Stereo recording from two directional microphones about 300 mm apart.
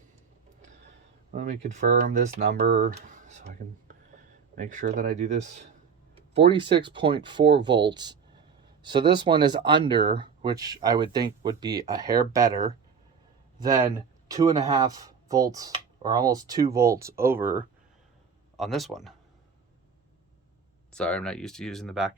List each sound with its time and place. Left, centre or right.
1.3 s a man's voice: right; by 19.1 s centre
20.9 s speech: centre